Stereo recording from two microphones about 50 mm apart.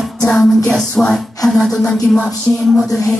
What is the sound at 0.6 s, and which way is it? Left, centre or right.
Music, centre.